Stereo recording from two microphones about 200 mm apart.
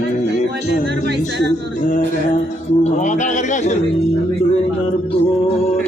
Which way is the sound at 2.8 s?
40° left (ahead or behind).